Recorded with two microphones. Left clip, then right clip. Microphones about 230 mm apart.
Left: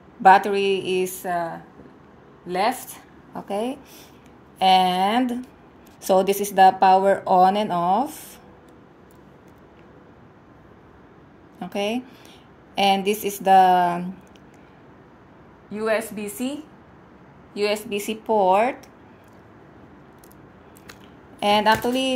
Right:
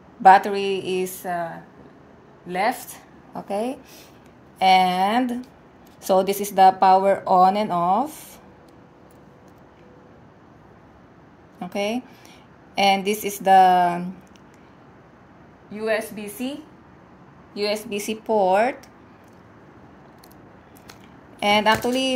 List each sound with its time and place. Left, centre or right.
0.2 s speech: centre
2.4 s a woman's voice: centre
11.6 s speech: centre
15.7 s a woman's voice: centre
17.8 s speech: centre
21.4 s speech: centre